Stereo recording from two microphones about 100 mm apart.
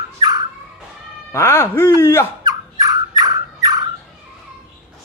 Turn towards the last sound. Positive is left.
turn(degrees=-40)  # may be behind; listen again after turning